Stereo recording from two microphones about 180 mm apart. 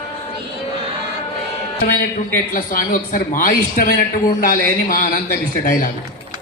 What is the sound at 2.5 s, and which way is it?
A man's voice, 50° left (ahead or behind).